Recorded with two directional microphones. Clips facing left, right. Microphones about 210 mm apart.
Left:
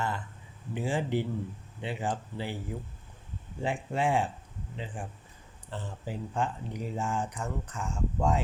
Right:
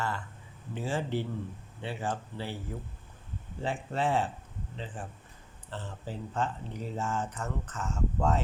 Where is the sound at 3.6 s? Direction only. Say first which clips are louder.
Left 1 dB; 15° left (ahead or behind).